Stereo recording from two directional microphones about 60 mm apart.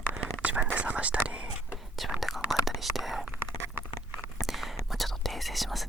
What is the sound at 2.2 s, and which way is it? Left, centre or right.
Whispering, centre.